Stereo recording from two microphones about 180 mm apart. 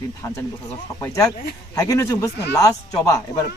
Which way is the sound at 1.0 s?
20° left (ahead or behind).